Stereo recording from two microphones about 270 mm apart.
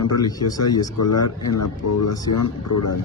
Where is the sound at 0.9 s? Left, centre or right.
Left.